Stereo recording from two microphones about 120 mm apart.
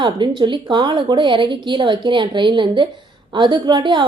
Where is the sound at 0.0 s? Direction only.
40° right (ahead or behind).